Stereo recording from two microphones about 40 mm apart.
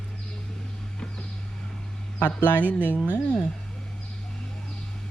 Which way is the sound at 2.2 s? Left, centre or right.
Left.